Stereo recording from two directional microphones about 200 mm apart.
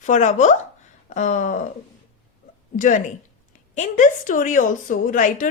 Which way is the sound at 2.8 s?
40° left (ahead or behind).